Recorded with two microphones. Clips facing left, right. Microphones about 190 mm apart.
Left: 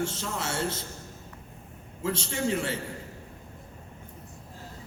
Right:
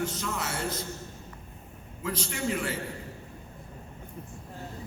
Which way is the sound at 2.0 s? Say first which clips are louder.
Left 3 dB; 25° left (ahead or behind).